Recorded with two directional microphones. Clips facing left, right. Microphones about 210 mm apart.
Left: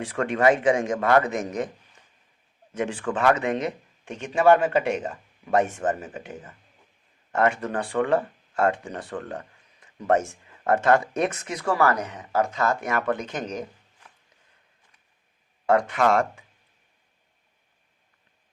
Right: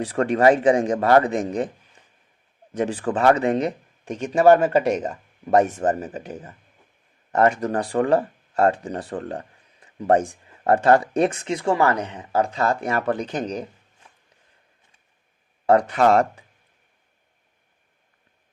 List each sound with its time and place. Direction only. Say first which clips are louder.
0.0 s speech: right 4 dB; 35° right (ahead or behind)
2.7 s speech: right 4 dB; 35° right (ahead or behind)
15.6 s speech: right 4 dB; 35° right (ahead or behind)